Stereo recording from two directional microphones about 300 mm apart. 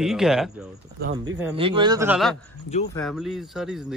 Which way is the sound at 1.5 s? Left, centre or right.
Centre.